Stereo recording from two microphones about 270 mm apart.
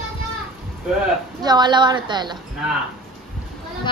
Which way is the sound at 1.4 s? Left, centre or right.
Centre.